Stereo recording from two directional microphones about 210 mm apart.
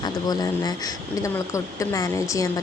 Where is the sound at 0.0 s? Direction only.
20° left (ahead or behind).